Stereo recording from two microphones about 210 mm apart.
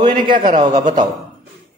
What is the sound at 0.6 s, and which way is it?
Speech, 20° right (ahead or behind).